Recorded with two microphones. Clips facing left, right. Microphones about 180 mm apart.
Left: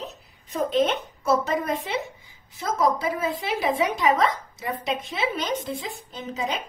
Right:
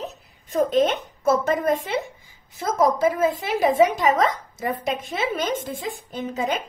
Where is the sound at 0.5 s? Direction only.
45° right (ahead or behind).